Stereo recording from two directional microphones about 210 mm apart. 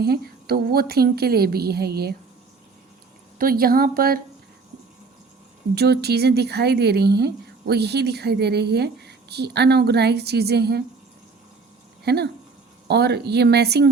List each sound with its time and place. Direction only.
0.0 s a woman's voice: 45° right (ahead or behind)
3.3 s a woman's voice: 45° right (ahead or behind)
5.7 s a woman's voice: 50° right (ahead or behind)
12.0 s a woman's voice: 50° right (ahead or behind)